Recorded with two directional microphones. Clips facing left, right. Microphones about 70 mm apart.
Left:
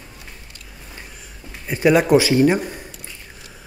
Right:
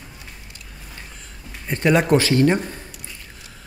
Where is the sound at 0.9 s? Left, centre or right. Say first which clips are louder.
Left 2 dB; centre.